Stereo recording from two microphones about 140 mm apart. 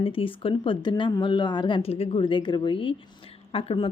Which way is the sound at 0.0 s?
40° left (ahead or behind).